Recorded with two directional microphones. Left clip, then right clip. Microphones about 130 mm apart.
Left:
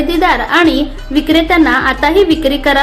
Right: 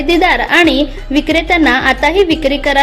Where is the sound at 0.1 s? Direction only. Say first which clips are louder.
Right 3 dB; 35° right (ahead or behind).